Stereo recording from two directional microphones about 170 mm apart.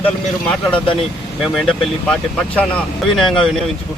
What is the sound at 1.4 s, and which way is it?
Speech, centre (ahead or behind).